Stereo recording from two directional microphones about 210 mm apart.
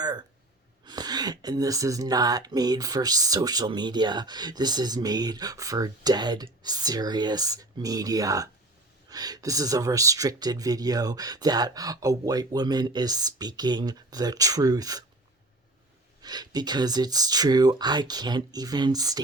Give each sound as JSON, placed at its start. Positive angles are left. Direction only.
{"t": 0.0, "sound": "gasp", "side_deg": -20}
{"t": 0.9, "sound": "speech", "side_deg": -20}
{"t": 16.2, "sound": "speech", "side_deg": -20}